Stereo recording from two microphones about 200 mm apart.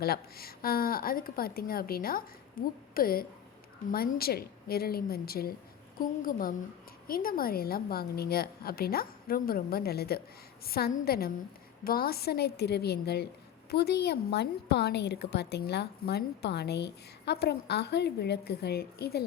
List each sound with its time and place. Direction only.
0.0 s a woman's voice: 50° left (ahead or behind)